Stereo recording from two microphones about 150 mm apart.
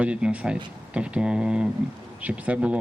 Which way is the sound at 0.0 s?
5° right (ahead or behind).